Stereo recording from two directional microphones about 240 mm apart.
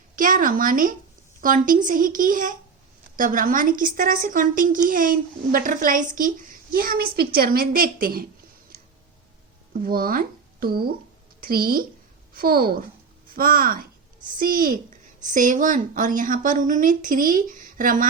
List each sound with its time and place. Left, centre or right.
0.2 s a woman's voice: right
9.7 s a woman's voice: right